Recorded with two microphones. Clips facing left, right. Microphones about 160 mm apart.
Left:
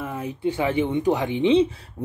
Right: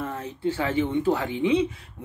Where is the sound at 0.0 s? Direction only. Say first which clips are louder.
Left 2 dB; 10° left (ahead or behind).